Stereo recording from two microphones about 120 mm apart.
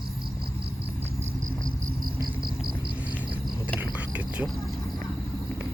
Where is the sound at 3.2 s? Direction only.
35° right (ahead or behind).